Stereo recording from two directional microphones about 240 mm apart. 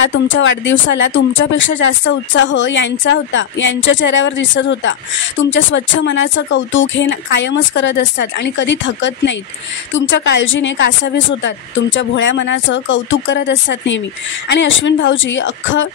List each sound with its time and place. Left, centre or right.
0.0 s speech: left